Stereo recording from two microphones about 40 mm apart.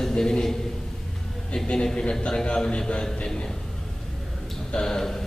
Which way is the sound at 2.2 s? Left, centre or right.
Left.